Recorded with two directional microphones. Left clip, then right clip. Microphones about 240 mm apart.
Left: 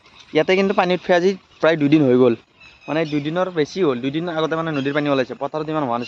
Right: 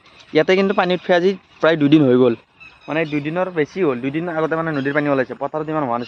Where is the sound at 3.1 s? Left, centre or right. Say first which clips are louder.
Even; centre.